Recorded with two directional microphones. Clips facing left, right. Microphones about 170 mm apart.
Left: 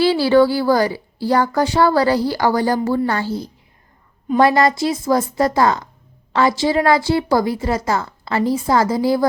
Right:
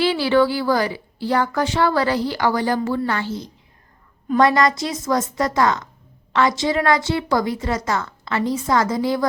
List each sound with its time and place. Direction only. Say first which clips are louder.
0.0 s speech: left 4 dB; 35° left (ahead or behind)